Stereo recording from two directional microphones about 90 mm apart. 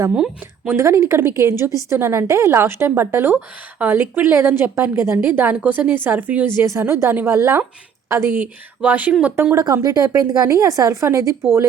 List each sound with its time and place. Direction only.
0.1 s speech: 5° right (ahead or behind)
0.7 s a woman's voice: 35° right (ahead or behind)
6.6 s a woman's voice: 30° right (ahead or behind)
8.8 s a woman's voice: 15° right (ahead or behind)
9.8 s a woman's voice: 45° right (ahead or behind)